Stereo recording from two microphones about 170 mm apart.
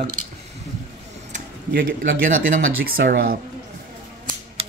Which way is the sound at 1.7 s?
60° right (ahead or behind).